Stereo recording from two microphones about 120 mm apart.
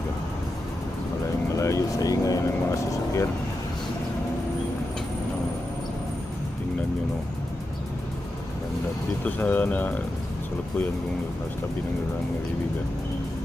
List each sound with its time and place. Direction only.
1.5 s music: 25° left (ahead or behind)
9.2 s speech: 15° left (ahead or behind)